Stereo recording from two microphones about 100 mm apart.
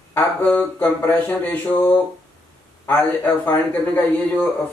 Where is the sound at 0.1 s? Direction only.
15° left (ahead or behind).